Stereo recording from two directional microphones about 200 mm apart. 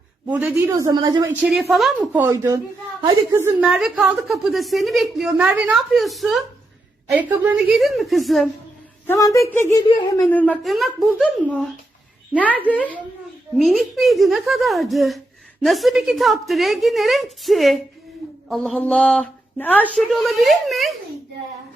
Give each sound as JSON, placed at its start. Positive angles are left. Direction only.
{"t": 0.3, "sound": "a woman's voice", "side_deg": -5}
{"t": 1.3, "sound": "a woman's voice", "side_deg": -5}
{"t": 9.0, "sound": "a woman's voice", "side_deg": 15}
{"t": 13.6, "sound": "a woman's voice", "side_deg": 0}